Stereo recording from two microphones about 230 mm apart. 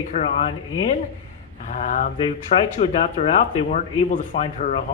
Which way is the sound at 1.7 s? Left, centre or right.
Left.